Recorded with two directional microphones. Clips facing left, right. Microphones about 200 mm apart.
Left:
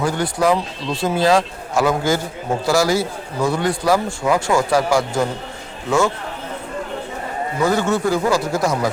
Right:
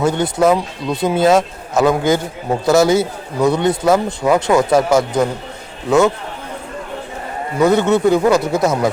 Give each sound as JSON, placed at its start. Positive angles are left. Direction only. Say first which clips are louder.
{"t": 0.0, "sound": "speech", "louder": "right 4 dB", "side_deg": -20}
{"t": 7.6, "sound": "speech", "louder": "right 6 dB", "side_deg": -20}